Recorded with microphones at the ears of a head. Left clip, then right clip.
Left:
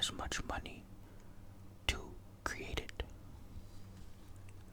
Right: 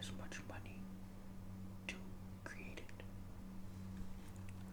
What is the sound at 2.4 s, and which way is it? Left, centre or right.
Whispering, left.